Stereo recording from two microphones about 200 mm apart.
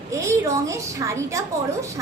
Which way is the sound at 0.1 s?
15° right (ahead or behind).